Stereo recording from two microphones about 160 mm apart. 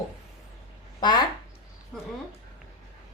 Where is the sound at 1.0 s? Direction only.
25° left (ahead or behind).